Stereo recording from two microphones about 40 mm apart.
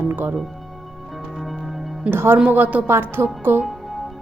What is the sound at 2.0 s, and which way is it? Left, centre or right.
Speech, right.